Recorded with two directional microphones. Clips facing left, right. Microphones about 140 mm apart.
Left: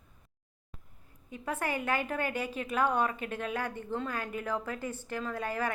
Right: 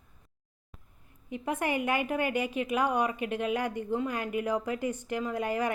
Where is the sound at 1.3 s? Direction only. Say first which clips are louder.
Right 4 dB; 15° right (ahead or behind).